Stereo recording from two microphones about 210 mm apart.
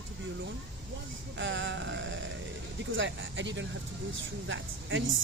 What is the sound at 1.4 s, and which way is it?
A woman's voice, 60° right (ahead or behind).